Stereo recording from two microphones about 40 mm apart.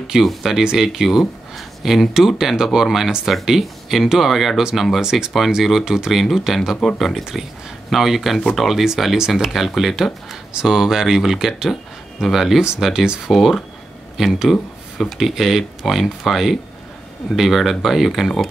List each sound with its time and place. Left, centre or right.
0.2 s speech: centre
13.0 s speech: right
13.3 s speech: centre
14.5 s speech: centre
15.1 s speech: centre